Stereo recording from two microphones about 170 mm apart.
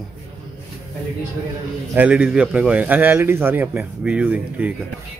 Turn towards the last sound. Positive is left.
turn(degrees=-10)  # may be behind; listen again after turning